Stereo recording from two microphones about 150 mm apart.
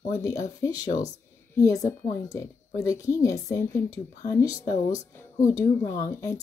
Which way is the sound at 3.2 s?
20° left (ahead or behind).